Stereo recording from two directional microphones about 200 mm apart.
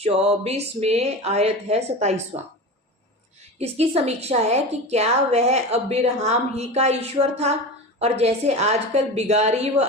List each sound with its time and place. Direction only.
0.0 s a woman's voice: 30° right (ahead or behind)
3.6 s a woman's voice: 30° right (ahead or behind)